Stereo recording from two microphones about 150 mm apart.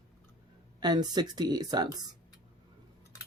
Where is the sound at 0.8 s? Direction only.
30° right (ahead or behind).